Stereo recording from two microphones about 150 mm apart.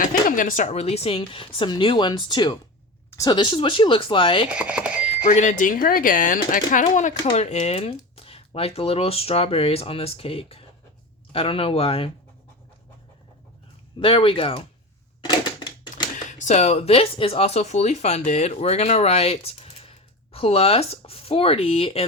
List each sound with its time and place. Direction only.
0.0 s speech: 60° left (ahead or behind); by 4.4 s 35° left (ahead or behind)
4.5 s speech: 5° right (ahead or behind)
5.3 s speech: 50° left (ahead or behind)
14.0 s speech: 35° left (ahead or behind)
15.2 s typewriter: 30° left (ahead or behind)
16.1 s speech: 50° left (ahead or behind)